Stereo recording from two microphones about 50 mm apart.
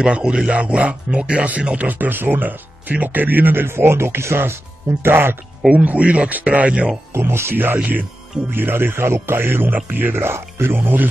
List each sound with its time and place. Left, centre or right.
0.0 s speech: centre; by 3.6 s right
3.6 s speech: right
5.7 s speech: right
7.2 s speech: right
10.8 s speech: right